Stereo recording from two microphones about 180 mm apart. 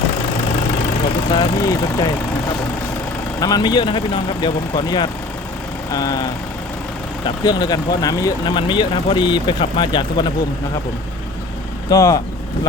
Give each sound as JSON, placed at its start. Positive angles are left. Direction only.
{"t": 1.3, "sound": "speech", "side_deg": 20}
{"t": 3.4, "sound": "speech", "side_deg": 20}
{"t": 7.4, "sound": "speech", "side_deg": 20}
{"t": 11.9, "sound": "speech", "side_deg": 20}